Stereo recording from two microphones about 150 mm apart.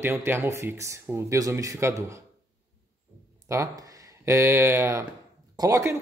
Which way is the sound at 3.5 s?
20° right (ahead or behind).